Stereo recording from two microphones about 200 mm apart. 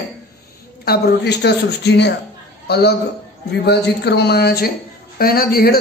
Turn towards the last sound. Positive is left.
turn(degrees=50)  # may be behind; listen again after turning